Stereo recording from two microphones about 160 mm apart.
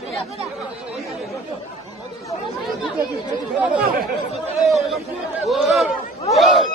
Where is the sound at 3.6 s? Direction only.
10° right (ahead or behind).